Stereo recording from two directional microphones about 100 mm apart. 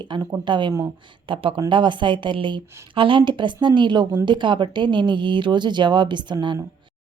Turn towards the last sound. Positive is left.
turn(degrees=-50)  # may be behind; listen again after turning